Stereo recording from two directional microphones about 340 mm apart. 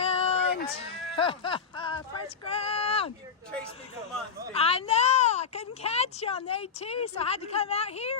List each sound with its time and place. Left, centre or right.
0.0 s a sound: centre
2.5 s speech: centre
4.5 s speech: centre